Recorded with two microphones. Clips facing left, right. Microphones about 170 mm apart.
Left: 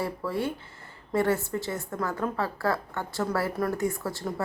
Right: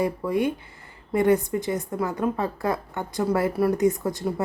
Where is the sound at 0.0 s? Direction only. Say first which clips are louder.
Right 6 dB; 15° right (ahead or behind).